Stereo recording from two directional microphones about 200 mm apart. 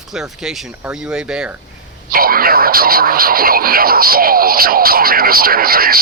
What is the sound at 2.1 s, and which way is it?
Speech, 45° right (ahead or behind).